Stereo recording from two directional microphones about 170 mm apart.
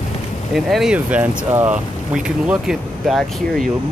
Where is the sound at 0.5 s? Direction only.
Centre (ahead or behind).